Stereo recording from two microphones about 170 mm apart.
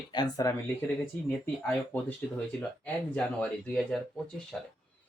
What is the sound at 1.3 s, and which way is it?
Speech, 10° left (ahead or behind).